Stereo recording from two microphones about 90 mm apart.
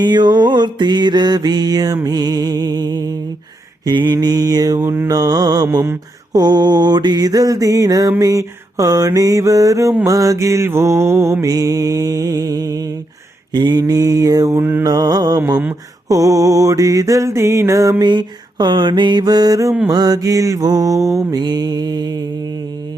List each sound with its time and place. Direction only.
0.0 s mantra: 55° right (ahead or behind)
2.0 s music: 45° right (ahead or behind)
3.8 s mantra: 50° right (ahead or behind)
4.8 s mantra: 25° right (ahead or behind)
5.0 s mantra: 45° right (ahead or behind); by 11.4 s 30° right (ahead or behind)
11.4 s mantra: 40° right (ahead or behind)
13.5 s mantra: 50° right (ahead or behind)
14.5 s mantra: 25° right (ahead or behind)
14.8 s mantra: 45° right (ahead or behind)
18.0 s mantra: 55° right (ahead or behind); by 21.4 s 35° right (ahead or behind)
21.4 s mantra: 50° right (ahead or behind)